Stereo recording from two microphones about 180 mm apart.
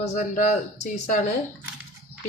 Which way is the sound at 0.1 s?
40° left (ahead or behind).